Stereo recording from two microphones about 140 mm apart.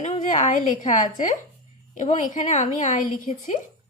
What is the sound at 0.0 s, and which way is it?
A woman's voice, 60° left (ahead or behind).